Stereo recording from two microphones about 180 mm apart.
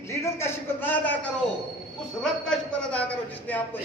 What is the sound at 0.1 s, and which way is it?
A man's voice, 15° left (ahead or behind).